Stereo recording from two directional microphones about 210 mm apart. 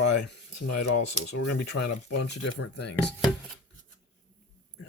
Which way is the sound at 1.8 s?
90° left.